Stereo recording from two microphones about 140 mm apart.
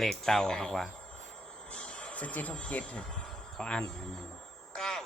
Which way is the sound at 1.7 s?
5° left (ahead or behind).